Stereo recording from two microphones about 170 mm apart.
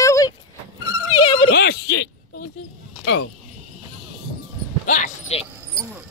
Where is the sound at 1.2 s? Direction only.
30° left (ahead or behind).